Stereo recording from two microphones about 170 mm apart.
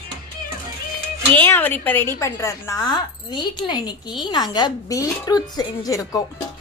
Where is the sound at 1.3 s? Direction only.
10° left (ahead or behind).